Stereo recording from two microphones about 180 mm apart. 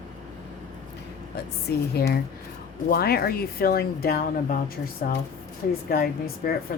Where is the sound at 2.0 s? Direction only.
60° left (ahead or behind).